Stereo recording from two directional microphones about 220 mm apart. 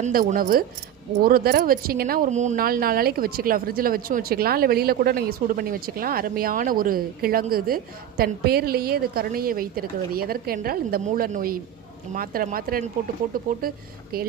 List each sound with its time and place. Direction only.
0.0 s speech: 35° right (ahead or behind)